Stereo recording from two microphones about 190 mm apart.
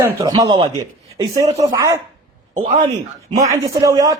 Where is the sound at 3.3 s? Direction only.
15° right (ahead or behind).